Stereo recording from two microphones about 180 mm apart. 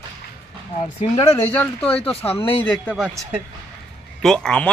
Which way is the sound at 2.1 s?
30° left (ahead or behind).